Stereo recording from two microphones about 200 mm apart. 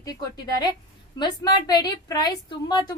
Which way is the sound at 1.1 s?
20° left (ahead or behind).